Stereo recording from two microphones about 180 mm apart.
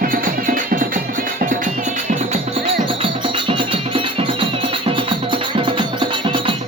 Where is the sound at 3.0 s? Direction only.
30° right (ahead or behind).